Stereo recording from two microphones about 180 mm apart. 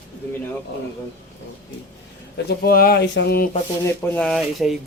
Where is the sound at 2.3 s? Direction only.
60° left (ahead or behind).